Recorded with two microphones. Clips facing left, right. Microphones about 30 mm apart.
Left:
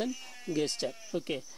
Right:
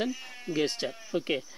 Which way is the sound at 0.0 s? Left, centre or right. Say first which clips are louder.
Right 3 dB; right.